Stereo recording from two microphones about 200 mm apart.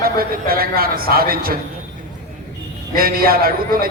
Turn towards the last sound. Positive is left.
turn(degrees=-50)  # may be behind; listen again after turning